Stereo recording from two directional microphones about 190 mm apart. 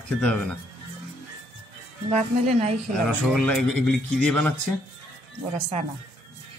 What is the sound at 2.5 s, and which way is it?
Speech, 35° right (ahead or behind).